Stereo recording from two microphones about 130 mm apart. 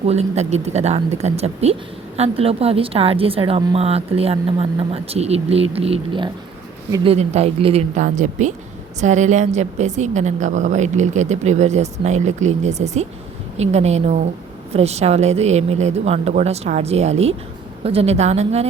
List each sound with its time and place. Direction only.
0.0 s a woman's voice: 55° right (ahead or behind)